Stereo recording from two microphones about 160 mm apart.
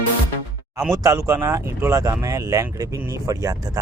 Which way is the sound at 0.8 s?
20° right (ahead or behind).